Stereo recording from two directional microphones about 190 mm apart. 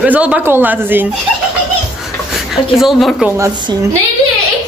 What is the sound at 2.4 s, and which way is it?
Speech, centre (ahead or behind).